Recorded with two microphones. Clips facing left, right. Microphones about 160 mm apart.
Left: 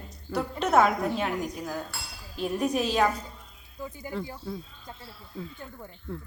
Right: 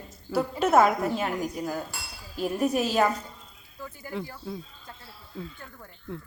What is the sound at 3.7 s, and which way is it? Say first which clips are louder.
Speech: left 3 dB; 15° left (ahead or behind).